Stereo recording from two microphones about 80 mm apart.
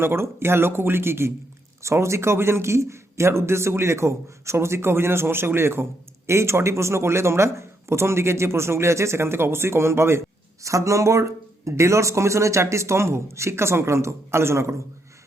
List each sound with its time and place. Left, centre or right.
0.0 s a man's voice: right